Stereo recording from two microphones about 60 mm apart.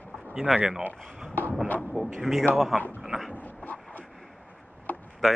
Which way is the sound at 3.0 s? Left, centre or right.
Centre.